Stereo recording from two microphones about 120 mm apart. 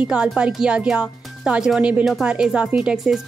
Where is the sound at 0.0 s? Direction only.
5° right (ahead or behind).